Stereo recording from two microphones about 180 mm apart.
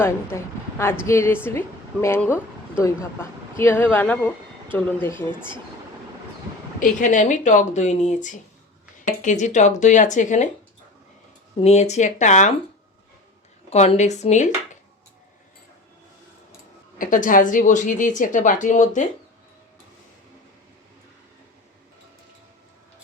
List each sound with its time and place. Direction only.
0.0 s a woman's voice: 15° left (ahead or behind)
6.7 s a woman's voice: 45° left (ahead or behind)
11.6 s speech: 40° left (ahead or behind)
13.7 s speech: 35° left (ahead or behind)
17.0 s a woman's voice: 50° left (ahead or behind)